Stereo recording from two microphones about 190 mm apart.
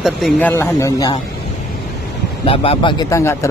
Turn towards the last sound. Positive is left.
turn(degrees=15)  # may be behind; listen again after turning